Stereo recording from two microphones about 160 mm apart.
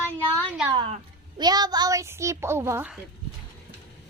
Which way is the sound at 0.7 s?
30° right (ahead or behind).